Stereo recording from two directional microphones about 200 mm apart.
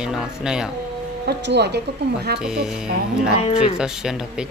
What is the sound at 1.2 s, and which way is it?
Speech, 55° right (ahead or behind).